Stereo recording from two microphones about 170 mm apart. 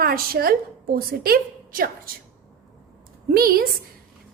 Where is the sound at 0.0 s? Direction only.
60° right (ahead or behind).